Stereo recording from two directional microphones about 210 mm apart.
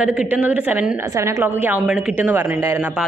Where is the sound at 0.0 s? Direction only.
5° right (ahead or behind).